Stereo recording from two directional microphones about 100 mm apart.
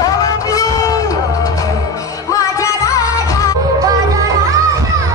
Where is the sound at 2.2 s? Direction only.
35° left (ahead or behind).